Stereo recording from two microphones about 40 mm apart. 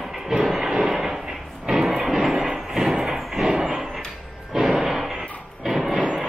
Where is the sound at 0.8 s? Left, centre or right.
Centre.